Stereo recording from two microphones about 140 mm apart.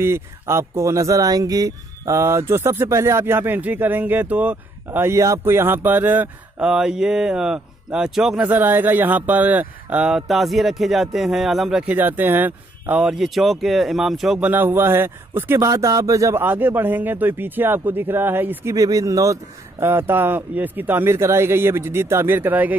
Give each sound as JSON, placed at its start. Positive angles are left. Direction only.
{"t": 0.0, "sound": "speech", "side_deg": -20}
{"t": 14.5, "sound": "speech", "side_deg": -15}